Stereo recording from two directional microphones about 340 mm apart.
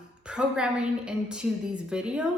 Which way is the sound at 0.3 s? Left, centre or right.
Centre.